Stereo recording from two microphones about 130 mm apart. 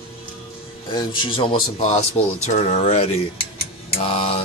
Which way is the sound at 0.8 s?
40° left (ahead or behind).